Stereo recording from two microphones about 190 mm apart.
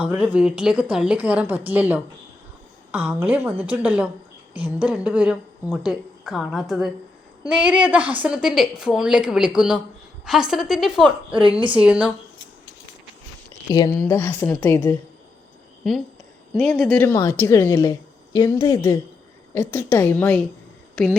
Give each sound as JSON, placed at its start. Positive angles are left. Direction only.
{"t": 0.0, "sound": "a woman's voice", "side_deg": -5}
{"t": 11.3, "sound": "a woman's voice", "side_deg": -25}
{"t": 11.8, "sound": "a woman's voice", "side_deg": -5}
{"t": 13.7, "sound": "a woman's voice", "side_deg": 20}
{"t": 16.6, "sound": "a woman's voice", "side_deg": 0}